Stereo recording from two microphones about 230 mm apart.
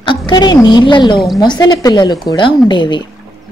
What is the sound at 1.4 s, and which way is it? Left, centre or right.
Speech, centre.